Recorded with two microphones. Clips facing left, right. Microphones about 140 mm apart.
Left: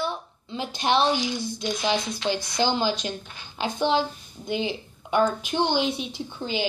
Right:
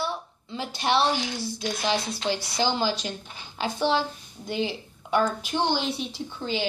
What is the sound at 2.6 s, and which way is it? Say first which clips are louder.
A woman's voice: left 2 dB; 20° left (ahead or behind).